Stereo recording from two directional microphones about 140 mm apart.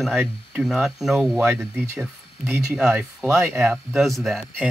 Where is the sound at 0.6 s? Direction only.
5° right (ahead or behind).